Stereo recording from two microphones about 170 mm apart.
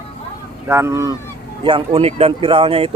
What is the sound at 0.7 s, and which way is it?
Honk, 15° right (ahead or behind).